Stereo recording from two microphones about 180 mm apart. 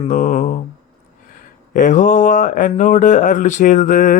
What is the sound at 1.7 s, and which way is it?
Speech, 45° left (ahead or behind).